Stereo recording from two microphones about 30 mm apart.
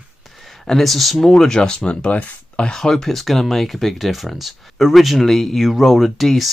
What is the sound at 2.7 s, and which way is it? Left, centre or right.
Speech, centre.